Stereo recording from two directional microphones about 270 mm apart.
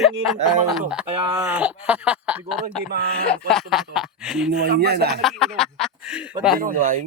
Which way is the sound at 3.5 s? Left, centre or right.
Centre.